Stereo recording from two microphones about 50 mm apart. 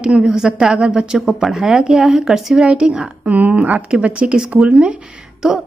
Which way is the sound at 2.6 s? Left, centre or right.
Centre.